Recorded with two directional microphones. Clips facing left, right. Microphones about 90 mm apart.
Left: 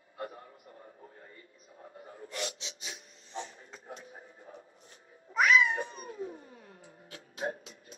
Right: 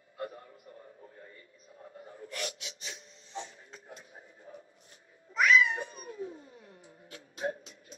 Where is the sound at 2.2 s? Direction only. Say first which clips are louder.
Left 1 dB; 25° left (ahead or behind).